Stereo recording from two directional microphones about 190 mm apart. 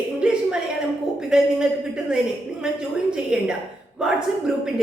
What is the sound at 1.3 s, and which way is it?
A woman's voice, 5° right (ahead or behind).